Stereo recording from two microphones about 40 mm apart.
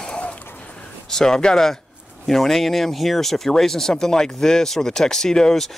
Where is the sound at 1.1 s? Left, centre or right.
Centre.